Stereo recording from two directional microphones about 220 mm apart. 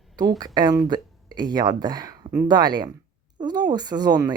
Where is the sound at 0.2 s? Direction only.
20° right (ahead or behind).